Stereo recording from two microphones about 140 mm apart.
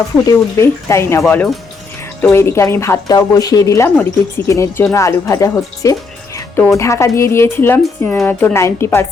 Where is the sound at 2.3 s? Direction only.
20° left (ahead or behind).